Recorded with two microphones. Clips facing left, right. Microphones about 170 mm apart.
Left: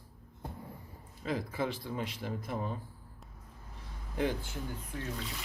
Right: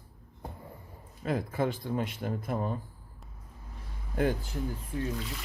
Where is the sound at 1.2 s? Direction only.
50° right (ahead or behind).